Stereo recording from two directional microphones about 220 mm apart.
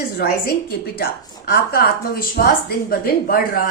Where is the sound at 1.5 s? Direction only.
40° left (ahead or behind).